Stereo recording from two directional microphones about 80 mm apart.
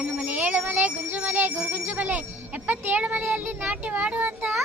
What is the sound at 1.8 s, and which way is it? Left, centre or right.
A child's voice, right.